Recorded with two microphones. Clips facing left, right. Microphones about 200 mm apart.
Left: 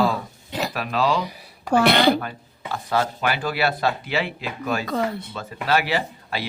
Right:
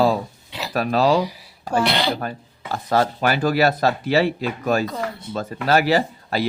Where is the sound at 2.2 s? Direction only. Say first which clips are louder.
Right 3 dB; 40° right (ahead or behind).